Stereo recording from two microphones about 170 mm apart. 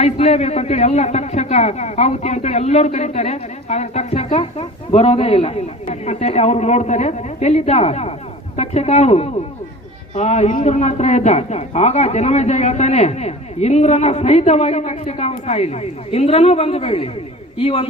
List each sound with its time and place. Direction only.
0.0 s a man's voice: 40° left (ahead or behind)